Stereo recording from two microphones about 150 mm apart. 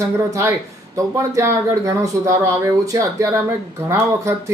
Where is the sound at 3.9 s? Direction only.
20° right (ahead or behind).